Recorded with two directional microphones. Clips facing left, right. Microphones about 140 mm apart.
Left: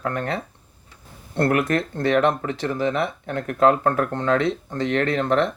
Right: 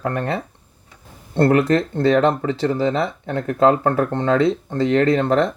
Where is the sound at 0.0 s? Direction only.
25° right (ahead or behind).